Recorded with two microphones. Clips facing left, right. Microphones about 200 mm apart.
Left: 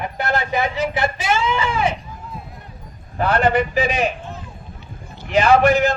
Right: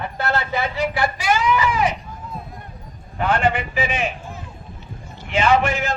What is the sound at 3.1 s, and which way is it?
Speech, 40° left (ahead or behind).